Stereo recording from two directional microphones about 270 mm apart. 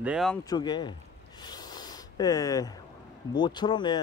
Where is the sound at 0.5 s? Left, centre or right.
Centre.